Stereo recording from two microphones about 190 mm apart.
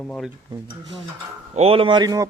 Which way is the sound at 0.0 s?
5° left (ahead or behind).